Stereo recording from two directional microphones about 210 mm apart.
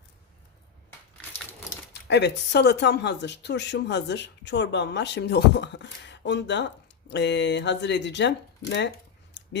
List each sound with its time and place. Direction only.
1.9 s speech: 55° left (ahead or behind)